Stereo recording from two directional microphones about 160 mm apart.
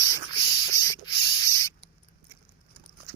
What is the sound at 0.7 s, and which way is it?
Rodents, 20° left (ahead or behind).